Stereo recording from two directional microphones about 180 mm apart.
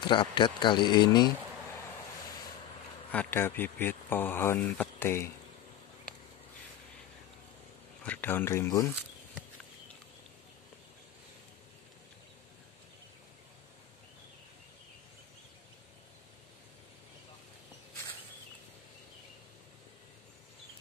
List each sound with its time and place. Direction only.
0.0 s speech: 25° left (ahead or behind)
3.1 s a man's voice: 10° left (ahead or behind)
8.0 s a man's voice: 10° left (ahead or behind)